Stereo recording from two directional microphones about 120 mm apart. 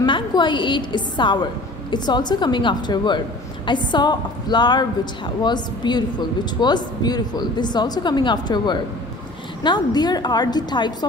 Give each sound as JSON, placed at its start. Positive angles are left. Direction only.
{"t": 0.0, "sound": "a woman's voice", "side_deg": 40}